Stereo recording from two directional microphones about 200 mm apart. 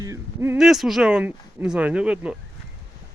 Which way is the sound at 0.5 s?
Centre (ahead or behind).